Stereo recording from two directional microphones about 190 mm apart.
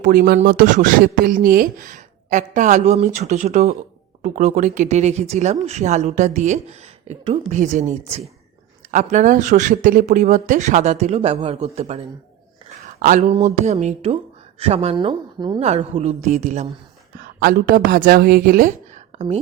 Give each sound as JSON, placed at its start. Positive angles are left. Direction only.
{"t": 0.0, "sound": "speech", "side_deg": -50}
{"t": 17.4, "sound": "speech", "side_deg": -50}